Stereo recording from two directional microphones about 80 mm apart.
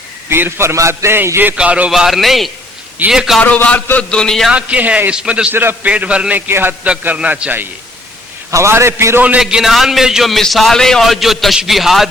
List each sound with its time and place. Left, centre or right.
0.3 s a man's voice: right
1.5 s a man's voice: centre
1.9 s a man's voice: centre
3.4 s a man's voice: centre
4.4 s a man's voice: centre
5.5 s a man's voice: right
5.9 s a man's voice: centre
6.5 s a man's voice: right
8.4 s a man's voice: right
9.4 s a man's voice: centre